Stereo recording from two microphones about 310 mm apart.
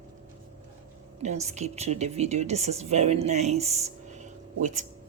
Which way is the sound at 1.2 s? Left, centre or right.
Right.